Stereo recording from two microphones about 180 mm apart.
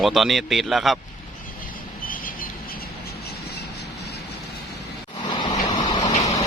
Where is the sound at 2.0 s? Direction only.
50° left (ahead or behind).